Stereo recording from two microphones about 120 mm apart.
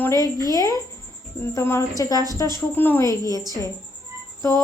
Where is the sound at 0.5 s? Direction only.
30° left (ahead or behind).